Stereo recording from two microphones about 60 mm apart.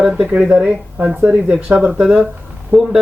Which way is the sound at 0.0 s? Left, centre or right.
Centre.